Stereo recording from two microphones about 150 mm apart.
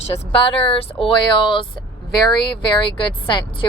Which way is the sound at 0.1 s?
35° left (ahead or behind).